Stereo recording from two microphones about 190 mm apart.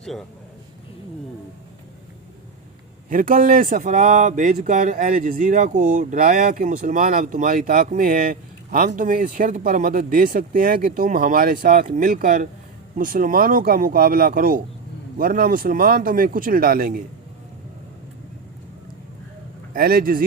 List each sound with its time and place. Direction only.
3.1 s speech: 45° right (ahead or behind)
19.7 s speech: 50° right (ahead or behind)